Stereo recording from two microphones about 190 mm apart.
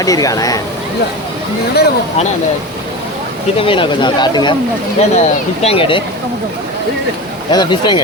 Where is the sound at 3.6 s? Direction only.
25° left (ahead or behind).